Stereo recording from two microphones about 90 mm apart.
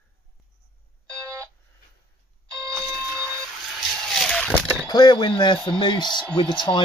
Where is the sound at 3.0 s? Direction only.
30° right (ahead or behind).